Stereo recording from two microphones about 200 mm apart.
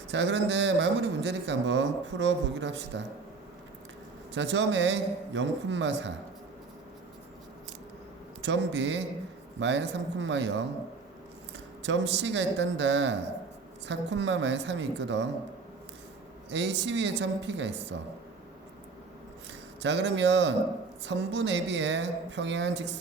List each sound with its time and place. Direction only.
0.1 s a man's voice: 65° right (ahead or behind)
4.4 s a man's voice: 65° right (ahead or behind)
8.4 s a man's voice: 65° right (ahead or behind)
11.8 s a man's voice: 65° right (ahead or behind)
16.5 s a man's voice: 60° right (ahead or behind)
19.8 s a man's voice: 60° right (ahead or behind)